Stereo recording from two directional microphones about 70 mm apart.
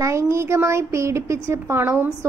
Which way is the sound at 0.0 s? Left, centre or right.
Right.